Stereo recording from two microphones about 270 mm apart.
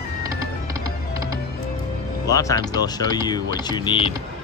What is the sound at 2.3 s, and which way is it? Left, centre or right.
Speech, centre.